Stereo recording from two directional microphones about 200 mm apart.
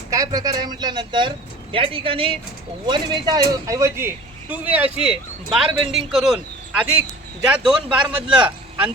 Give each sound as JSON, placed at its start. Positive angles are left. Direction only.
{"t": 0.1, "sound": "a man's voice", "side_deg": -15}